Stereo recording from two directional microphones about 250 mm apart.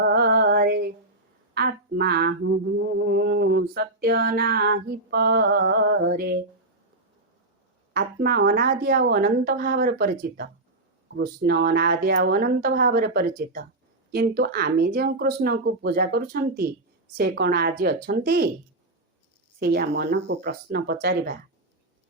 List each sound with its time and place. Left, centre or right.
0.0 s music: right
1.5 s mantra: right
7.9 s mantra: right
19.5 s mantra: right